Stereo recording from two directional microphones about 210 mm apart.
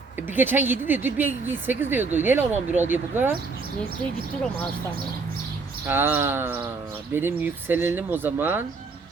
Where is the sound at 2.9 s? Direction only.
10° right (ahead or behind).